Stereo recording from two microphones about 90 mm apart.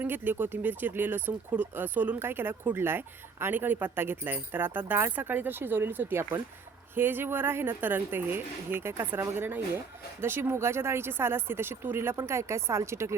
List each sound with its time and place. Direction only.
0.0 s speech: 20° right (ahead or behind)